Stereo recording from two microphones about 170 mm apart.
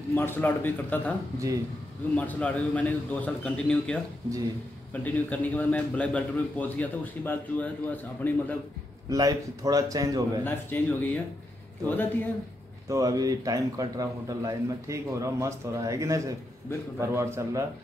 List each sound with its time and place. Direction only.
0.1 s a man's voice: 10° left (ahead or behind)
2.1 s a man's voice: 10° left (ahead or behind)
5.0 s a man's voice: 10° left (ahead or behind)
9.1 s a man's voice: 20° right (ahead or behind)
10.4 s a man's voice: 10° left (ahead or behind)
12.8 s a man's voice: 20° right (ahead or behind)